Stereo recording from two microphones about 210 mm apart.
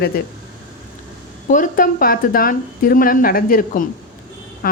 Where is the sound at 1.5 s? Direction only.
40° left (ahead or behind).